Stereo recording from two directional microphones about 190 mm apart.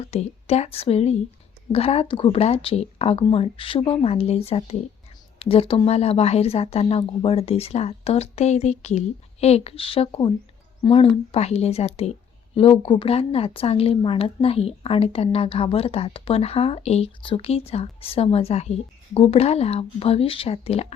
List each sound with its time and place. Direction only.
0.0 s speech: 35° left (ahead or behind)